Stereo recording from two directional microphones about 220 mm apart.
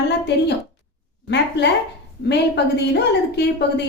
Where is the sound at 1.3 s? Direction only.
50° left (ahead or behind).